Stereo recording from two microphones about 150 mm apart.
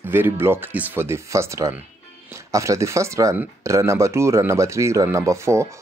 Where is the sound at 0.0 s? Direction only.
15° right (ahead or behind).